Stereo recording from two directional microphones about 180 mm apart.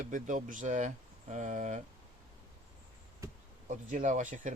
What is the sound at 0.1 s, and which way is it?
Speech, 45° right (ahead or behind).